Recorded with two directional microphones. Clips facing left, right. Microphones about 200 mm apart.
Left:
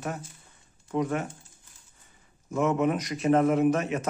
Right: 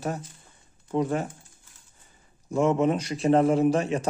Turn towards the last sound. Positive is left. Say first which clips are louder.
# right 1 dB
turn(degrees=-30)  # may be behind; listen again after turning